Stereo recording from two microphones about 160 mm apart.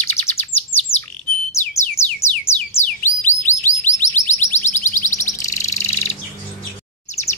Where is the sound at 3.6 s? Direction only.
50° left (ahead or behind).